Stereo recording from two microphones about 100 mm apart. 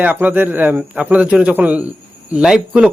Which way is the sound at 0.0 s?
15° right (ahead or behind).